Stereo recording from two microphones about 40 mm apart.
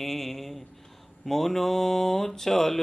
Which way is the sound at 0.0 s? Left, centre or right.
Centre.